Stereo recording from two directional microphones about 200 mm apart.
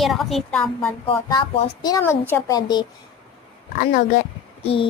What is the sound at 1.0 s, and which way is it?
Speech, 25° left (ahead or behind).